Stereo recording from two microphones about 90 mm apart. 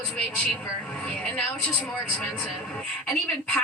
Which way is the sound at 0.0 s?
15° left (ahead or behind).